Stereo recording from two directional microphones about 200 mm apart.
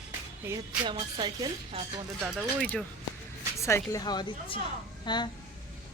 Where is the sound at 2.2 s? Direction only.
Centre (ahead or behind).